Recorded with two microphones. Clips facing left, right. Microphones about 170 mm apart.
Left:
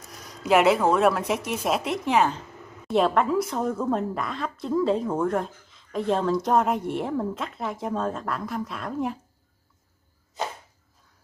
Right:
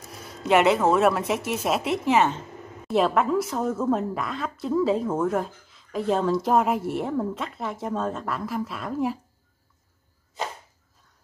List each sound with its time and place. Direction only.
0.4 s a woman's voice: centre (ahead or behind)